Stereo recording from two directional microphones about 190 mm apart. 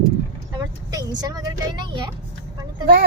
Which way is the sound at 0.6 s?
20° right (ahead or behind).